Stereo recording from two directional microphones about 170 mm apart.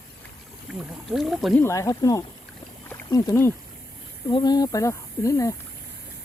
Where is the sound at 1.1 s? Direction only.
Centre (ahead or behind).